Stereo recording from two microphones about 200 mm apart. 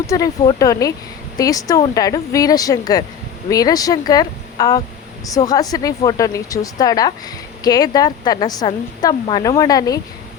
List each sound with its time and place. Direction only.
0.1 s a woman's voice: 15° left (ahead or behind)